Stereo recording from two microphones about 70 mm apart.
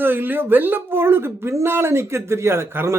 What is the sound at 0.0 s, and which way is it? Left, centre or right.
Speech, right.